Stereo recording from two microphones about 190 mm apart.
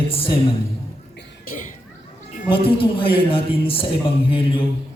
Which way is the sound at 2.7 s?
25° left (ahead or behind).